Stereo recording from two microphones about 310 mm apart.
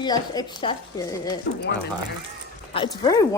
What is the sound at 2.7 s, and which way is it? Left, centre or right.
Speech, centre.